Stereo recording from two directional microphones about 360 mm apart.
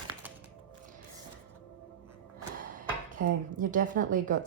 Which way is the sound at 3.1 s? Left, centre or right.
Right.